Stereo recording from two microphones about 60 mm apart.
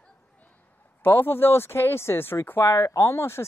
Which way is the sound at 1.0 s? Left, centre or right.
Left.